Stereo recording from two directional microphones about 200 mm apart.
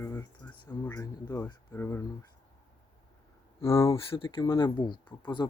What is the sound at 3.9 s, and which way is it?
Speech, 25° left (ahead or behind).